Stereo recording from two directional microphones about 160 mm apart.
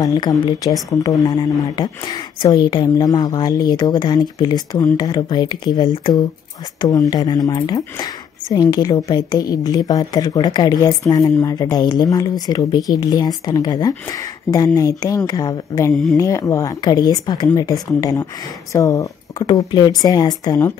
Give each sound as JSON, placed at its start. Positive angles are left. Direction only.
{"t": 0.0, "sound": "speech", "side_deg": 25}